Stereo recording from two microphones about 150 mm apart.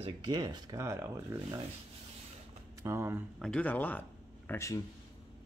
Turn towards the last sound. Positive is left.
turn(degrees=20)  # may be behind; listen again after turning